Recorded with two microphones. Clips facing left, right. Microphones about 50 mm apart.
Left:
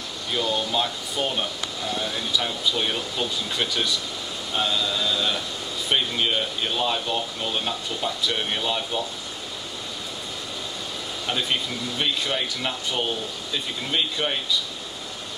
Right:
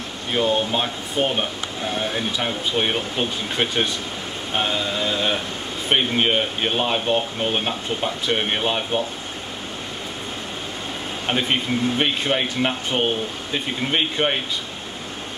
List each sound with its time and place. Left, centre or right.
0.3 s speech: right
11.2 s speech: right